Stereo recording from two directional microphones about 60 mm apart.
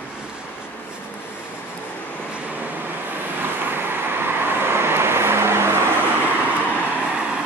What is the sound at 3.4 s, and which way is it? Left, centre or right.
Vehicle, right.